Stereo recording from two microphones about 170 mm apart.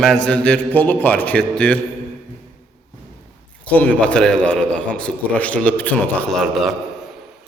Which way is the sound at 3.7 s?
10° left (ahead or behind).